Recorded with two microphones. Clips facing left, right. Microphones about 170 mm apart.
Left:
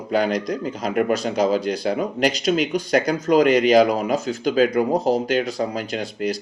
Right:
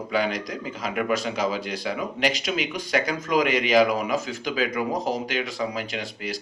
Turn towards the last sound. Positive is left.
turn(degrees=45)  # may be behind; listen again after turning